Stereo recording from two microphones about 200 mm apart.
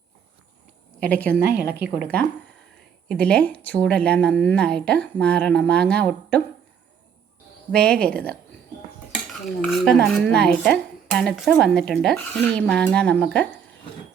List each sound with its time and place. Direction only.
0.9 s a woman's voice: 5° left (ahead or behind)
3.1 s speech: 5° left (ahead or behind)
7.7 s speech: 5° left (ahead or behind)
9.6 s speech: 5° left (ahead or behind)